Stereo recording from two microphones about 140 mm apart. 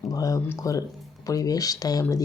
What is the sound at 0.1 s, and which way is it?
Speech, 25° left (ahead or behind).